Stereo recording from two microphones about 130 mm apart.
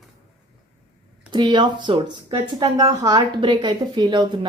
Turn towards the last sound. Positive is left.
turn(degrees=-35)  # may be behind; listen again after turning